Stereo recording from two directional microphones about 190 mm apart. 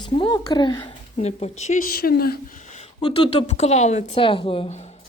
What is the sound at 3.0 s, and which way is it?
Speech, 25° left (ahead or behind).